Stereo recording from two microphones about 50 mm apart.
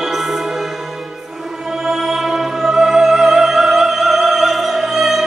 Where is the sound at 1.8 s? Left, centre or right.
Centre.